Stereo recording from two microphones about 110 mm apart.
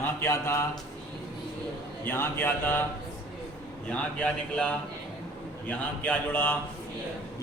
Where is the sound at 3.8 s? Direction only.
10° left (ahead or behind).